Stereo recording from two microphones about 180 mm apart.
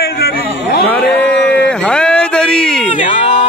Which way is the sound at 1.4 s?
65° left (ahead or behind).